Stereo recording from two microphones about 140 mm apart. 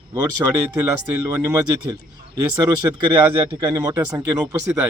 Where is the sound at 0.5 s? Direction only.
20° right (ahead or behind).